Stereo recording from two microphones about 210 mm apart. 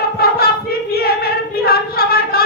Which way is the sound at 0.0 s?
45° left (ahead or behind).